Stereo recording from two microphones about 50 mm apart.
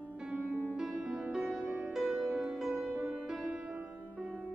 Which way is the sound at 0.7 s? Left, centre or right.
Centre.